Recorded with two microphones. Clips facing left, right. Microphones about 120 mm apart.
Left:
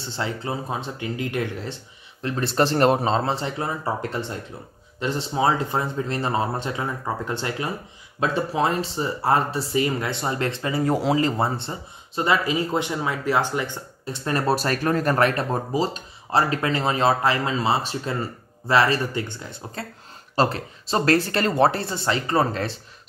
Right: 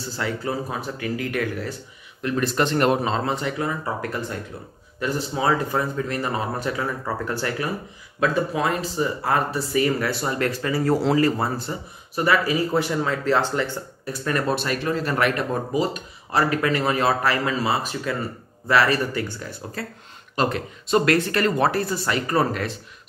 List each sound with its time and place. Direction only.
0.0 s speech: 25° left (ahead or behind)
14.5 s speech: 40° left (ahead or behind)